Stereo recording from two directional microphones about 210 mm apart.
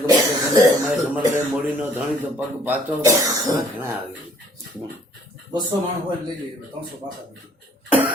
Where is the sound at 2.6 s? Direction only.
10° right (ahead or behind).